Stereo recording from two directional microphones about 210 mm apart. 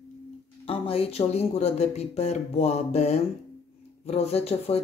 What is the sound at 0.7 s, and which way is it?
Speech, 25° left (ahead or behind).